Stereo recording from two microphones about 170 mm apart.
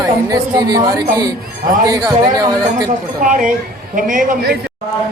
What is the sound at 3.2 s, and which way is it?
Speech, 50° right (ahead or behind).